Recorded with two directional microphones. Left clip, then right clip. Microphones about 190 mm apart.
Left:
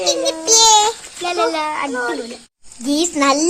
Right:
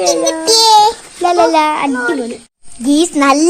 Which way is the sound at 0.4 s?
35° right (ahead or behind).